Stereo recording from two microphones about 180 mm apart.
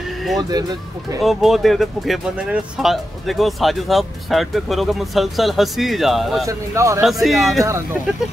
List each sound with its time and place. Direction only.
1.2 s speech: centre (ahead or behind)
6.4 s speech: 15° right (ahead or behind)
7.0 s speech: centre (ahead or behind)